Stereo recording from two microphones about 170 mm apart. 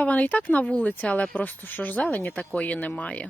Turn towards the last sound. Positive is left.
turn(degrees=10)  # may be behind; listen again after turning